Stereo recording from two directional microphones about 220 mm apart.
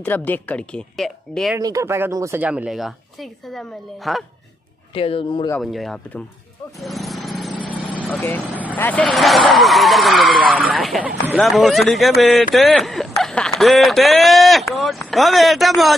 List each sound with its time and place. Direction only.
0.0 s speech: 10° left (ahead or behind)
1.6 s speech: 15° right (ahead or behind)
4.9 s speech: 25° left (ahead or behind)
5.6 s speech: centre (ahead or behind)
6.8 s lawn mower: centre (ahead or behind)
7.8 s vehicle: 5° left (ahead or behind)
8.7 s speech: 10° left (ahead or behind)